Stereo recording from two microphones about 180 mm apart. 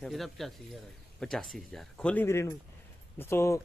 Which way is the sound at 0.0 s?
Centre (ahead or behind).